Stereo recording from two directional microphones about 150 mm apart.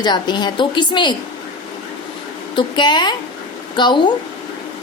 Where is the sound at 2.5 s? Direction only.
30° left (ahead or behind).